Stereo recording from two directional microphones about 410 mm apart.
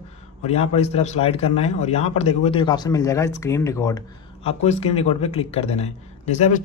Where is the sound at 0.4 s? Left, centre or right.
Centre.